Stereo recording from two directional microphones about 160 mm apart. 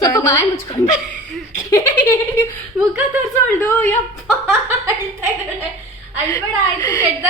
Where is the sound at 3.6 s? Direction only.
10° left (ahead or behind).